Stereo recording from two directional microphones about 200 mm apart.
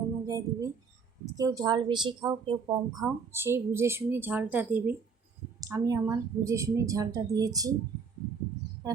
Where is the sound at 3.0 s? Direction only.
10° right (ahead or behind).